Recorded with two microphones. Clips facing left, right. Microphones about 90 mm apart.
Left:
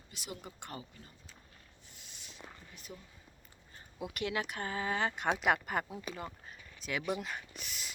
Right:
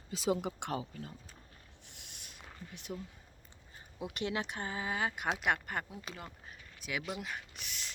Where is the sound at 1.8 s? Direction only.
70° right (ahead or behind).